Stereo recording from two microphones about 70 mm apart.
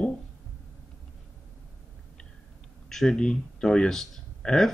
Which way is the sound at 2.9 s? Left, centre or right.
Centre.